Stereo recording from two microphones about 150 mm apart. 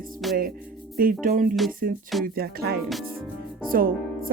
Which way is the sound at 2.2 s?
90° right.